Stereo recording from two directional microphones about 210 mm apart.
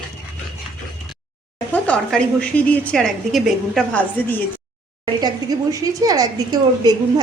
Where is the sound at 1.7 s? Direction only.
5° left (ahead or behind).